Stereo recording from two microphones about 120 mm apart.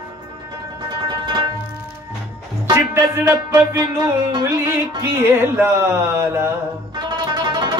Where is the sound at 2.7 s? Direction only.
20° right (ahead or behind).